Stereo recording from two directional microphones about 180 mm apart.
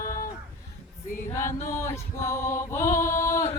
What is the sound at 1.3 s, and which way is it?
Music, 15° left (ahead or behind).